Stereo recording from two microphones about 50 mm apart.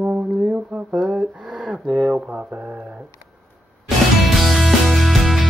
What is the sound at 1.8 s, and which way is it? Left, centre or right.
Speech, centre.